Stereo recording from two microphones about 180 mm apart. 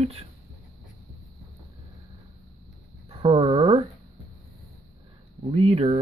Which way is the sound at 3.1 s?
30° right (ahead or behind).